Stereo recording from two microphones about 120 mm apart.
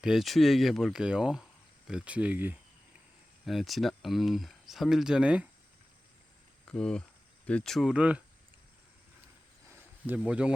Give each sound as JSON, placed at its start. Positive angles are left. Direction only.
{"t": 0.0, "sound": "speech", "side_deg": 0}
{"t": 3.4, "sound": "speech", "side_deg": 0}
{"t": 6.7, "sound": "speech", "side_deg": 5}
{"t": 9.6, "sound": "cricket", "side_deg": -20}
{"t": 10.2, "sound": "speech", "side_deg": -10}